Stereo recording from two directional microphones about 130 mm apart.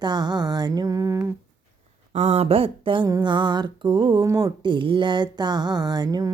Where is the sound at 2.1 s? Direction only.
60° right (ahead or behind); by 3.1 s 40° right (ahead or behind).